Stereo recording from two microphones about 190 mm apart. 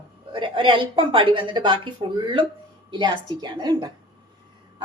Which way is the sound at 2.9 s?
25° right (ahead or behind).